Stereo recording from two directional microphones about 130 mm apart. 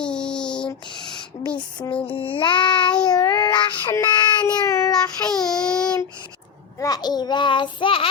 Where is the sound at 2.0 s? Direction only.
45° left (ahead or behind); by 4.9 s 20° left (ahead or behind).